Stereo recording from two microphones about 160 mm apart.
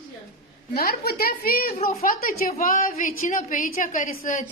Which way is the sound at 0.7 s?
70° left (ahead or behind).